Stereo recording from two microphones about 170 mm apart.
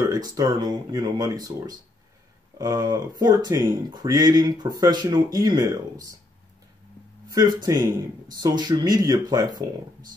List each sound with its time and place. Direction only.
0.1 s speech: 20° right (ahead or behind)
2.6 s speech: 20° right (ahead or behind)
7.2 s speech: 20° right (ahead or behind)